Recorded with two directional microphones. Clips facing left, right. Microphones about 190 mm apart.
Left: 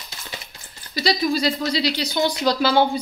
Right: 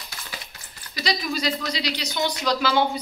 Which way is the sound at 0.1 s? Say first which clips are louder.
Left 4 dB; 25° left (ahead or behind).